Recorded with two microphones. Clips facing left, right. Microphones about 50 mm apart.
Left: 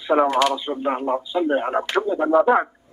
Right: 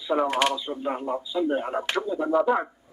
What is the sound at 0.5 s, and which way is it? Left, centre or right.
A man's voice, left.